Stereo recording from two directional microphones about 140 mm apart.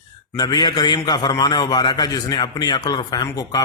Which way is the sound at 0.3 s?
30° left (ahead or behind).